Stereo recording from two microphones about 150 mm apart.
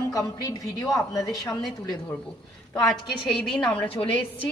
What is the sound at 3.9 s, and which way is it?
Speech, 40° left (ahead or behind).